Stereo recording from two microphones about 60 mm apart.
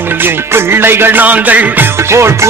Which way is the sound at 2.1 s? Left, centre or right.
Right.